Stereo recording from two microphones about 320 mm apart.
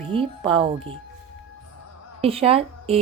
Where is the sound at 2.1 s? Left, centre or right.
Centre.